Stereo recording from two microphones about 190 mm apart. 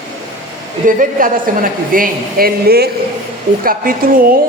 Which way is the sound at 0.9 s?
45° right (ahead or behind).